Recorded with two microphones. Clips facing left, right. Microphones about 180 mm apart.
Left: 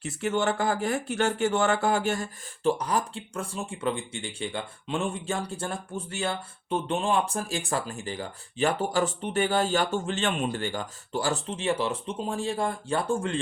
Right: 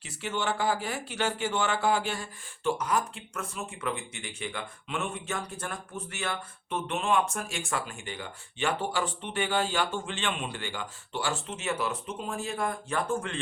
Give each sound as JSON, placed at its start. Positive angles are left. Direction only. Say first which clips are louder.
{"t": 0.0, "sound": "speech", "louder": "left 6 dB", "side_deg": 50}